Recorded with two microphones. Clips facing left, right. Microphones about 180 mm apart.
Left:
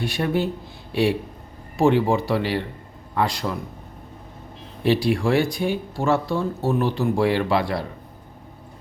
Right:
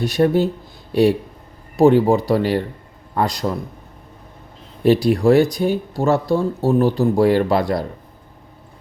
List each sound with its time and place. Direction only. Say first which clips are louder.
0.0 s speech: right 7 dB; 40° right (ahead or behind)
4.8 s speech: right 5 dB; 45° right (ahead or behind)